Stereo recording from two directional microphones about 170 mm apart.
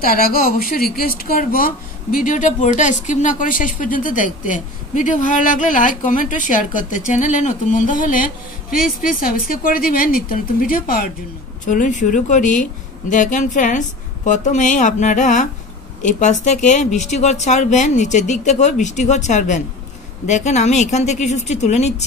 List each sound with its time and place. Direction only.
0.0 s speech: 60° left (ahead or behind); by 22.0 s 40° left (ahead or behind)